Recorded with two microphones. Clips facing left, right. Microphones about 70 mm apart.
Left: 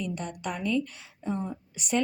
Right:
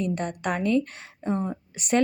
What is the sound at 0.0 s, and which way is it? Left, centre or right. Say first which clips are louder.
A woman's voice: right 6 dB; right.